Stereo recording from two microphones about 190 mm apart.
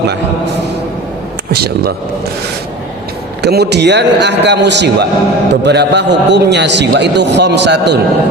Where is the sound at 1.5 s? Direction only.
55° right (ahead or behind).